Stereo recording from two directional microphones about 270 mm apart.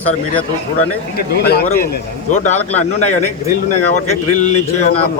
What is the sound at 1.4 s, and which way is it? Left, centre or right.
A man's voice, left.